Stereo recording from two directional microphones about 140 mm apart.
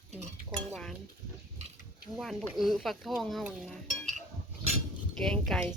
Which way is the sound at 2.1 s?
10° right (ahead or behind).